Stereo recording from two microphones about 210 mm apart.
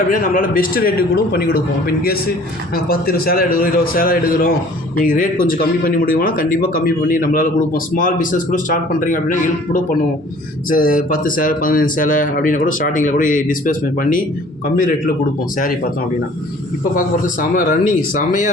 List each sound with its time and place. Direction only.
0.1 s a man's voice: 40° left (ahead or behind)
16.9 s speech: 40° left (ahead or behind)